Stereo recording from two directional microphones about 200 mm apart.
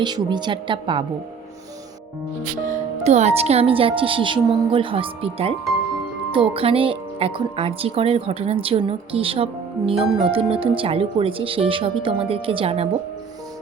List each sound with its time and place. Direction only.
0.0 s speech: 20° right (ahead or behind)
2.6 s speech: 35° right (ahead or behind)